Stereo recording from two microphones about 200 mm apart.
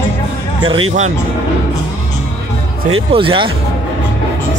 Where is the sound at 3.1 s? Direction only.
25° right (ahead or behind).